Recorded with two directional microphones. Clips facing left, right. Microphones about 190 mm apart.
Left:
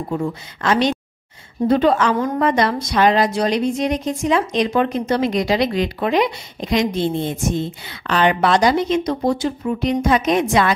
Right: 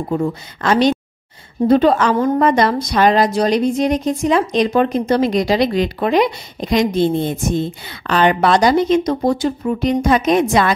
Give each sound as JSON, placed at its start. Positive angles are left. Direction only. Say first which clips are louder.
{"t": 0.1, "sound": "speech", "louder": "right 5 dB", "side_deg": -40}